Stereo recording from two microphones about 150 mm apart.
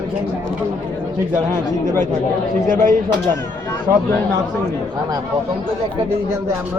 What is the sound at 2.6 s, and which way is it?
Speech, 65° right (ahead or behind).